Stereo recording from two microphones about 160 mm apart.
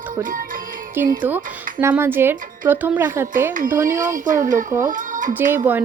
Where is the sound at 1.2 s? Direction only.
10° right (ahead or behind).